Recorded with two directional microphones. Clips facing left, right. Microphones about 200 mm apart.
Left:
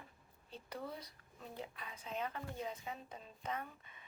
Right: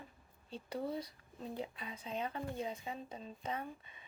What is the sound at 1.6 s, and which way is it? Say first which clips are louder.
Speech: right 5 dB; 25° right (ahead or behind).